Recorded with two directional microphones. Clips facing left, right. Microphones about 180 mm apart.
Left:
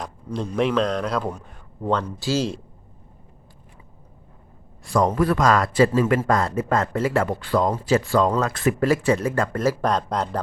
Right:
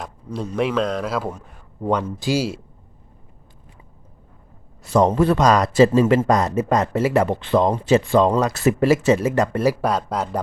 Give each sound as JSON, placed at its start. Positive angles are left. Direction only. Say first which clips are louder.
{"t": 0.3, "sound": "a man's voice", "louder": "even", "side_deg": -5}
{"t": 4.9, "sound": "speech", "louder": "right 3 dB", "side_deg": -25}
{"t": 9.6, "sound": "speech", "louder": "right 2 dB", "side_deg": -10}